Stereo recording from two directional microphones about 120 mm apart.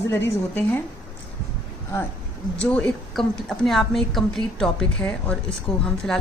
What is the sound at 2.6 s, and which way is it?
A woman's voice, 10° left (ahead or behind).